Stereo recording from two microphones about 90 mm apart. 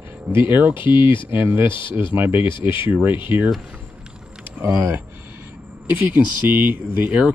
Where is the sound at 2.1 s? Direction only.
20° right (ahead or behind).